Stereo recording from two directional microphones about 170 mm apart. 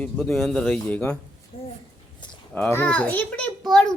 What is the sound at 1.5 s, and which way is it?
Speech, 35° left (ahead or behind).